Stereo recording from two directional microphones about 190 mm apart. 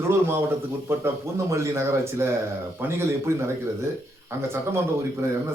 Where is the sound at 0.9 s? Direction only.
15° right (ahead or behind).